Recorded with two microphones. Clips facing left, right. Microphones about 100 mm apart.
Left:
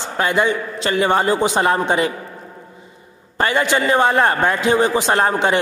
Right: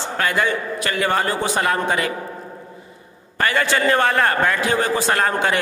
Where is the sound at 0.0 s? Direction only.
20° left (ahead or behind).